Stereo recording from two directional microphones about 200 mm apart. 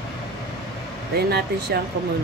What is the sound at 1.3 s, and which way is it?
Speech, 55° right (ahead or behind).